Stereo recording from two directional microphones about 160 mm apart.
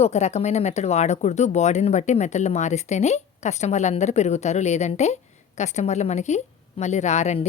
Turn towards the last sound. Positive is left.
turn(degrees=45)  # may be behind; listen again after turning